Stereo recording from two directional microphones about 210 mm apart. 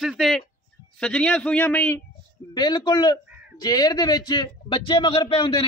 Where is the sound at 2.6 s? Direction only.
20° left (ahead or behind).